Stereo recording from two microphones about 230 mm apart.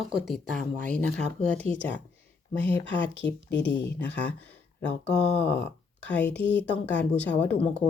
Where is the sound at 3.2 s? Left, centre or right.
Left.